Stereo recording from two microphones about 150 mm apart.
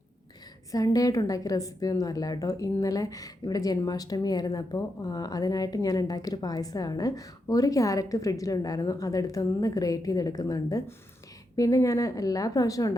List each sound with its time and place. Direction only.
0.7 s a woman's voice: 25° left (ahead or behind)